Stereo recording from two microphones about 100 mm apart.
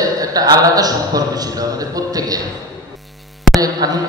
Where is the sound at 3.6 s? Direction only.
40° right (ahead or behind).